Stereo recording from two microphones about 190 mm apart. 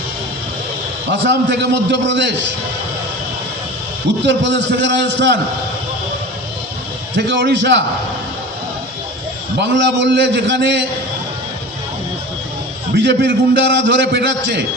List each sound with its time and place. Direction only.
1.2 s a man's voice: 65° right (ahead or behind)
4.3 s a man's voice: 65° right (ahead or behind)
7.2 s a man's voice: 65° right (ahead or behind)
9.6 s a man's voice: 70° right (ahead or behind)
13.0 s a man's voice: 60° right (ahead or behind)